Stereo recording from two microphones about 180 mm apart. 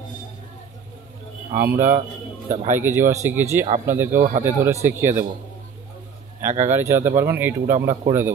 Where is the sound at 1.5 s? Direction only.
10° right (ahead or behind).